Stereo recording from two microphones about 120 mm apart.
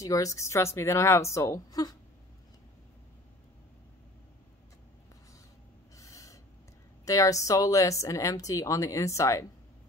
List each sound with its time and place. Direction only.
0.0 s speech: 25° left (ahead or behind)
5.9 s owl: 25° left (ahead or behind)
7.1 s speech: 25° left (ahead or behind)